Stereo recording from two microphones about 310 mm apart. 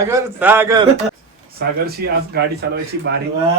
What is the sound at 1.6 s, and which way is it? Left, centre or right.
Speech, right.